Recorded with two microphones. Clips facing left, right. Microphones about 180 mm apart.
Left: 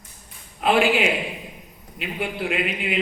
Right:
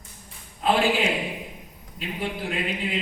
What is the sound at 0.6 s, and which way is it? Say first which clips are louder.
A man's voice: left 3 dB; 75° left (ahead or behind).